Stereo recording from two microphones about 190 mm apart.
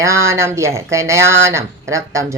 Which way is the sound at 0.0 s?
15° right (ahead or behind).